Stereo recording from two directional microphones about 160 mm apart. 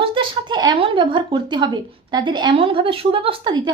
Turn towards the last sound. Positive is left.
turn(degrees=-25)  # may be behind; listen again after turning